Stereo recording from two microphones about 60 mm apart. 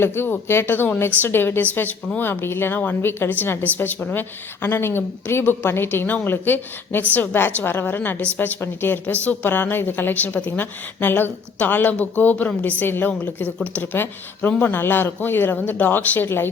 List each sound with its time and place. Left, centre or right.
0.0 s a woman's voice: left
2.4 s a woman's voice: left